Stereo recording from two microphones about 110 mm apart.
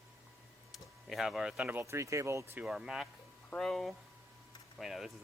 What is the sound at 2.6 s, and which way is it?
Speech, 5° right (ahead or behind).